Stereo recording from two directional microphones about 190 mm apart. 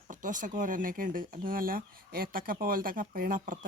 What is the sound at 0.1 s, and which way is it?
Speech, 45° right (ahead or behind).